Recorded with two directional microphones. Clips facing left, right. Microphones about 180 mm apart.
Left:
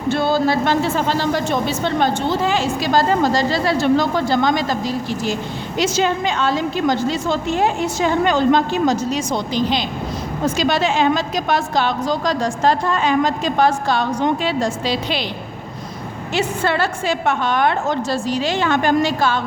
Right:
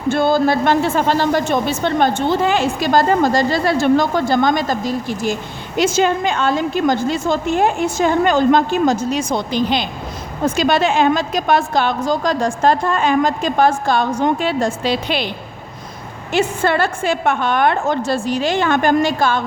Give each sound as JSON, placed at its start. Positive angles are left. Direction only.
{"t": 0.1, "sound": "a woman's voice", "side_deg": -50}
{"t": 16.3, "sound": "a woman's voice", "side_deg": -50}